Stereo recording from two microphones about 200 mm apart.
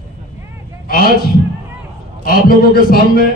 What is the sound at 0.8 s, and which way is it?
Speech, 45° left (ahead or behind).